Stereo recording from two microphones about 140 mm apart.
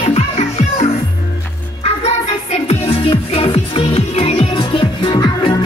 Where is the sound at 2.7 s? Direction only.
40° left (ahead or behind).